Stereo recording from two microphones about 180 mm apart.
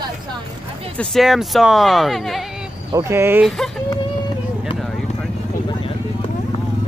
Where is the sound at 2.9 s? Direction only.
15° right (ahead or behind).